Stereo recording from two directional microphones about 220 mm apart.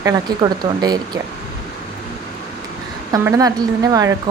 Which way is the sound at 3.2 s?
15° right (ahead or behind).